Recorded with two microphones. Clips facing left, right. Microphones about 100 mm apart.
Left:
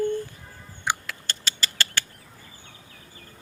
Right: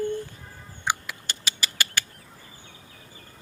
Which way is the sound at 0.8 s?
15° right (ahead or behind).